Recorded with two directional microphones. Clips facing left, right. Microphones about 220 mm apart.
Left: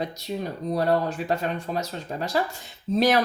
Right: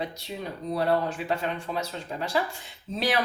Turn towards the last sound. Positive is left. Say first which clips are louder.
# left 6 dB
turn(degrees=40)  # may be behind; listen again after turning